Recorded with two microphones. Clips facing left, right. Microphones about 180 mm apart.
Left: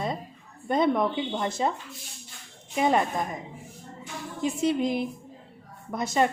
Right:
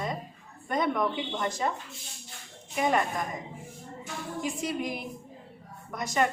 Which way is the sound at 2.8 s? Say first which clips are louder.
Left 3 dB; 25° left (ahead or behind).